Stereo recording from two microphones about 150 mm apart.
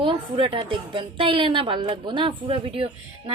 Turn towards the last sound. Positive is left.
turn(degrees=-35)  # may be behind; listen again after turning